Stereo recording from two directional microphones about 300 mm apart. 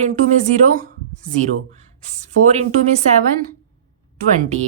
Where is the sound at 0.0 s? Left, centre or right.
Right.